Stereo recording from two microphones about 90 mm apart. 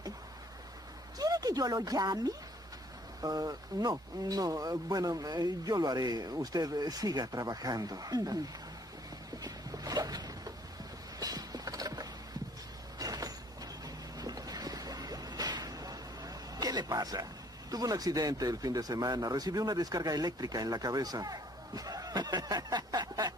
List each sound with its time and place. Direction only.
1.1 s speech: 45° right (ahead or behind)
9.4 s boat: 45° right (ahead or behind)
11.1 s a sound: 45° right (ahead or behind)
13.0 s vehicle: 45° right (ahead or behind)
13.8 s boat: 45° right (ahead or behind)